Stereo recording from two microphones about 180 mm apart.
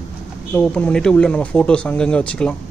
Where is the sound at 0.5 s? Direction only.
5° left (ahead or behind).